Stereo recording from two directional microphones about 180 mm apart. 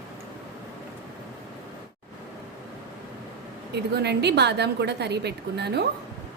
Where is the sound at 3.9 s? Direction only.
70° right (ahead or behind).